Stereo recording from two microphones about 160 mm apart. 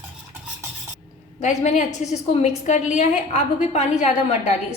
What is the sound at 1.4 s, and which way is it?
A woman's voice, 50° left (ahead or behind).